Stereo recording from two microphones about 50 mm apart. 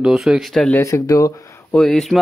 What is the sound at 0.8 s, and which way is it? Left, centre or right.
Speech, left.